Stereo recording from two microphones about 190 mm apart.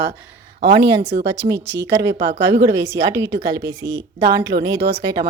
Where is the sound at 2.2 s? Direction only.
65° right (ahead or behind).